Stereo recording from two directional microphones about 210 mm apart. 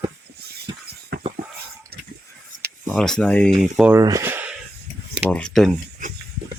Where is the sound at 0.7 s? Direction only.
20° right (ahead or behind).